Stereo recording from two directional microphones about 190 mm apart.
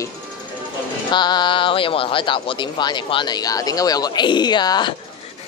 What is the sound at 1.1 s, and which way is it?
Speech, 25° left (ahead or behind).